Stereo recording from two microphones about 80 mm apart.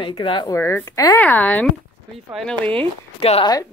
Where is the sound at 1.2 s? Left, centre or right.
Centre.